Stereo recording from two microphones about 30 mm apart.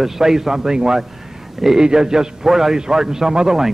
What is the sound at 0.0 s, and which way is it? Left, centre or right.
Speech, centre.